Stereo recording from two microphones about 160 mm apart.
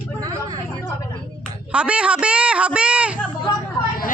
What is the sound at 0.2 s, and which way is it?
Vehicle, 25° right (ahead or behind).